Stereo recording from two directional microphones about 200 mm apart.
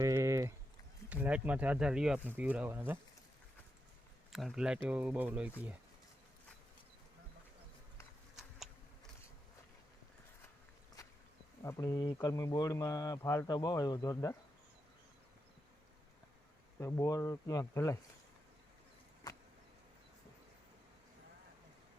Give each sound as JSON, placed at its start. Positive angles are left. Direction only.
{"t": 0.0, "sound": "a sound", "side_deg": -15}
{"t": 1.1, "sound": "speech", "side_deg": -5}
{"t": 4.3, "sound": "speech", "side_deg": 0}
{"t": 11.6, "sound": "speech", "side_deg": 15}
{"t": 16.8, "sound": "speech", "side_deg": 15}